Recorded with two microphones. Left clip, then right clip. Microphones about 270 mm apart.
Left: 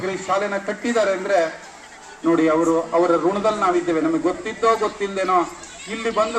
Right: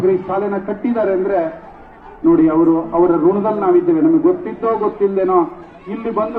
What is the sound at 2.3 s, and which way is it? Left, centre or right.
A man's voice, left.